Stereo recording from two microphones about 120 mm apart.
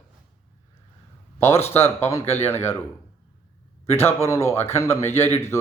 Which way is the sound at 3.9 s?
20° left (ahead or behind).